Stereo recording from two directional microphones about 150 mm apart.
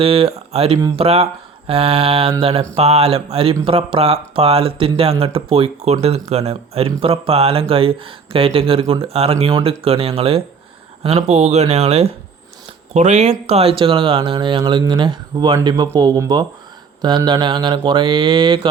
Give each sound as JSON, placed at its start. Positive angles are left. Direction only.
{"t": 0.0, "sound": "speech", "side_deg": -40}